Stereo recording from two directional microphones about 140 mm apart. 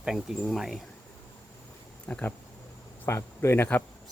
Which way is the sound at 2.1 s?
10° left (ahead or behind).